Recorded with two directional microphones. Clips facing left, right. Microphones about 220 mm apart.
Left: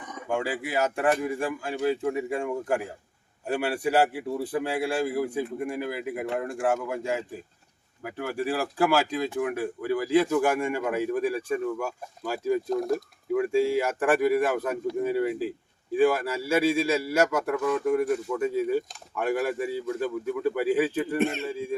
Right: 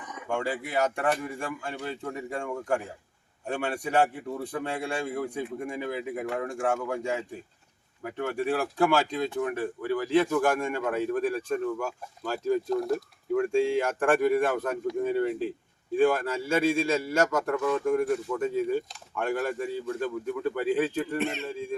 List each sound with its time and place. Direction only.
0.3 s a man's voice: 5° left (ahead or behind)
21.2 s speech: 50° left (ahead or behind)
21.4 s a man's voice: 10° left (ahead or behind)